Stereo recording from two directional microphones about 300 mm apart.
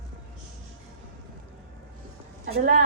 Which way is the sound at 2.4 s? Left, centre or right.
Right.